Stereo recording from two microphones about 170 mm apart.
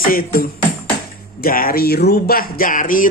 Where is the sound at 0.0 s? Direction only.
60° left (ahead or behind).